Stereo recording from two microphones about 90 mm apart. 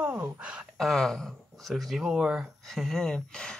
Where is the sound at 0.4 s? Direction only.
10° right (ahead or behind).